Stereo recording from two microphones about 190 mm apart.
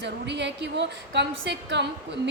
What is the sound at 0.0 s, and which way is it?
A woman's voice, 70° right (ahead or behind).